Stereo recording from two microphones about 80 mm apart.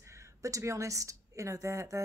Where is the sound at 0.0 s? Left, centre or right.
Right.